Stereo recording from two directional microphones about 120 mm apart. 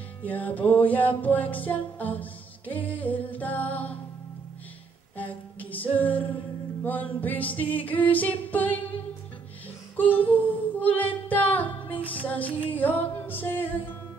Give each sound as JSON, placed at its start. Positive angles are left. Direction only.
{"t": 0.2, "sound": "music", "side_deg": 15}
{"t": 5.1, "sound": "a capella", "side_deg": 15}
{"t": 6.8, "sound": "music", "side_deg": 15}
{"t": 10.3, "sound": "music", "side_deg": 15}